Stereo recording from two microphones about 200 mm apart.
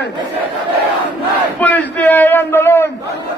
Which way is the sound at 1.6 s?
10° left (ahead or behind).